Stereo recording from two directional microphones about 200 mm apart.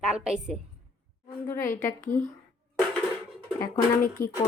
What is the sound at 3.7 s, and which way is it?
Speech, 40° left (ahead or behind).